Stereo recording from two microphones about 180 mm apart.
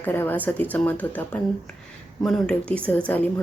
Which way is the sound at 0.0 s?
10° left (ahead or behind).